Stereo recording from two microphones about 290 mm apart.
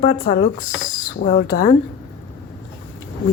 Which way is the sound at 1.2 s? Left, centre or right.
Left.